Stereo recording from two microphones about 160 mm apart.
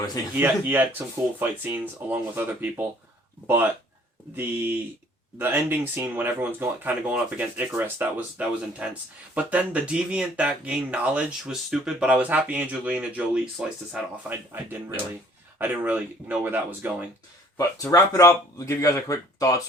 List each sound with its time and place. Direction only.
0.3 s speech: 10° right (ahead or behind)
17.6 s speech: 20° left (ahead or behind)